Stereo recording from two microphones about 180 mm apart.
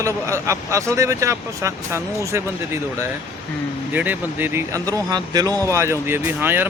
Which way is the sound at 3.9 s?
10° right (ahead or behind).